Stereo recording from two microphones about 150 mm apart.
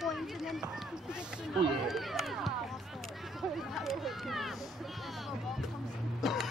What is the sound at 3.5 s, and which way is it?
Speech, centre (ahead or behind).